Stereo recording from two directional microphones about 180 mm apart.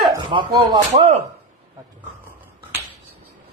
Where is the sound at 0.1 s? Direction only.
25° right (ahead or behind).